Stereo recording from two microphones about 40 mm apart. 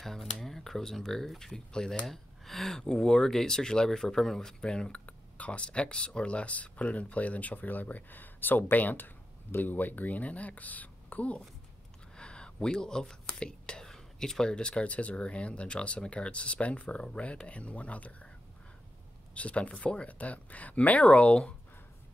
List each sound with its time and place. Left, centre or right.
0.0 s speech: centre
2.0 s speech: centre
2.8 s speech: centre
4.6 s speech: left
12.2 s whispering: left
13.8 s a sound: centre
14.5 s speech: left
19.3 s speech: left
20.1 s speech: left